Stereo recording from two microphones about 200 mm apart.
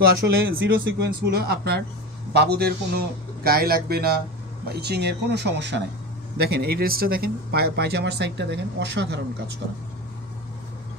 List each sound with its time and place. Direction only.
0.0 s a man's voice: 60° right (ahead or behind)